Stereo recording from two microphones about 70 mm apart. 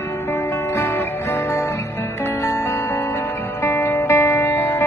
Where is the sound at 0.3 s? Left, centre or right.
Left.